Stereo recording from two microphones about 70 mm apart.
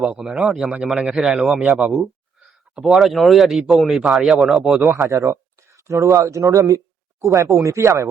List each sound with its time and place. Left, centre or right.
0.0 s speech: centre
5.0 s speech: right